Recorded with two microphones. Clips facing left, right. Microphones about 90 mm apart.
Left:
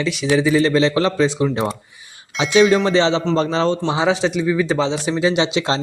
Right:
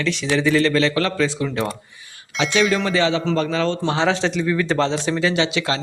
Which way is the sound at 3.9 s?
10° left (ahead or behind).